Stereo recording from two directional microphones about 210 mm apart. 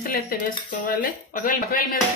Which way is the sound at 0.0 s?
45° left (ahead or behind).